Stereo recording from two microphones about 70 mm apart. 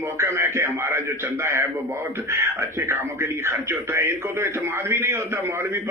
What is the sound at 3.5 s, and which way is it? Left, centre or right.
A man's voice, right.